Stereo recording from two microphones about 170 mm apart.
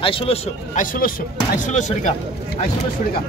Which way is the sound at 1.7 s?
45° left (ahead or behind).